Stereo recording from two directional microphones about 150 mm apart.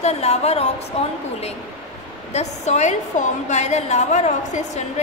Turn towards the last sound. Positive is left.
turn(degrees=50)  # may be behind; listen again after turning